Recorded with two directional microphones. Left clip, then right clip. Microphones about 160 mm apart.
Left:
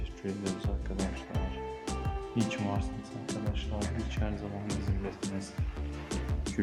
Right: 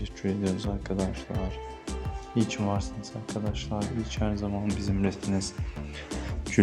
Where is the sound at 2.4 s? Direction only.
35° right (ahead or behind).